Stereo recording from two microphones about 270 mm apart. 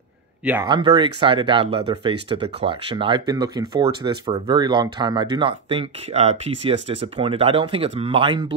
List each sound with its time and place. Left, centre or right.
0.4 s speech: centre